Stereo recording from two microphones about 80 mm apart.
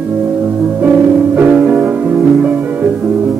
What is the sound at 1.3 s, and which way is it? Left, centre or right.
Music, centre.